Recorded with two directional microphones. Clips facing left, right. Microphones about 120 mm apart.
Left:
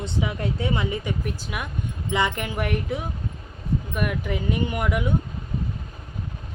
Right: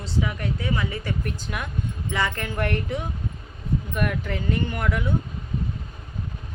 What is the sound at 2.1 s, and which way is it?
Speech, 15° left (ahead or behind).